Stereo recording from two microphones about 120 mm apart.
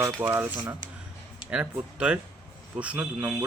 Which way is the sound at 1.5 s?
10° right (ahead or behind).